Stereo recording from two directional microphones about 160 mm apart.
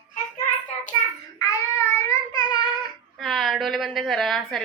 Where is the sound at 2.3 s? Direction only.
25° left (ahead or behind).